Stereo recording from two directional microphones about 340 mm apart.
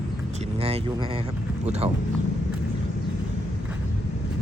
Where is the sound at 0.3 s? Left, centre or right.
Centre.